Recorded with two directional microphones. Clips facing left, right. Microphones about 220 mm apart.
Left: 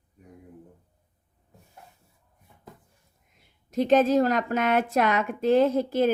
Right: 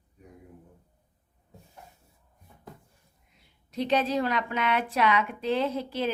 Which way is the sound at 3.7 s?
45° left (ahead or behind).